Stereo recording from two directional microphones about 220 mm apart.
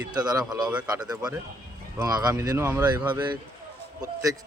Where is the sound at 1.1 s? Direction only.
15° right (ahead or behind).